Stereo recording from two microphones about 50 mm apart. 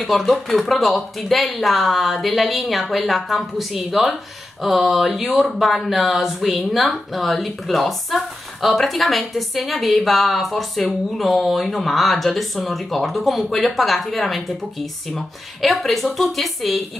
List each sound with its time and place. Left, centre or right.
0.0 s speech: centre